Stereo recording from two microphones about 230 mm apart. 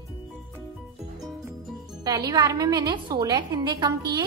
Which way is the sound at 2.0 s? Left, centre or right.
Centre.